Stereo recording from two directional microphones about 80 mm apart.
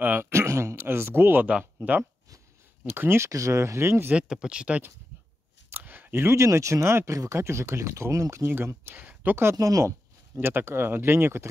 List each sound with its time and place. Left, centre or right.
0.0 s speech: right
0.3 s a sound: right
0.7 s speech: right
3.3 s speech: right
4.1 s speech: centre; by 11.4 s right